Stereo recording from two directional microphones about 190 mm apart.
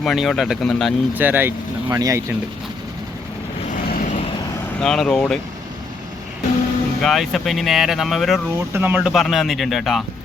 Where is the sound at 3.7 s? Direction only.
45° left (ahead or behind).